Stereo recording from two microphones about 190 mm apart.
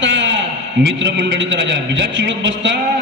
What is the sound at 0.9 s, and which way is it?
A man's voice, 65° right (ahead or behind).